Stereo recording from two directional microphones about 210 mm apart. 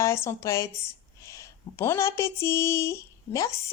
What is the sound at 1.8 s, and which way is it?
Speech, 10° left (ahead or behind).